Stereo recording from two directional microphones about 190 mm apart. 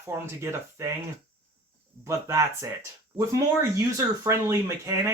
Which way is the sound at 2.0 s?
15° right (ahead or behind).